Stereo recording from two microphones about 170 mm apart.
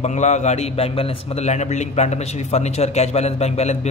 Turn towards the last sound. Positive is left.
turn(degrees=40)  # may be behind; listen again after turning